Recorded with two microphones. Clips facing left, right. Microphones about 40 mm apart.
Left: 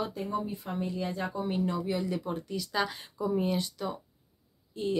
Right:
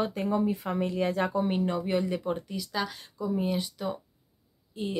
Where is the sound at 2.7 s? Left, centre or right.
Centre.